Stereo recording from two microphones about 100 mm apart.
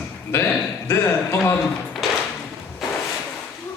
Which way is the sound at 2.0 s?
Centre (ahead or behind).